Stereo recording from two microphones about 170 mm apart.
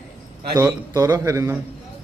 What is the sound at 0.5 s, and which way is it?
A man's voice, 20° right (ahead or behind).